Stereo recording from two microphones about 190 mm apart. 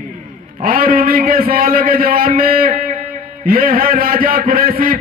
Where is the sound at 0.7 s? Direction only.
50° right (ahead or behind).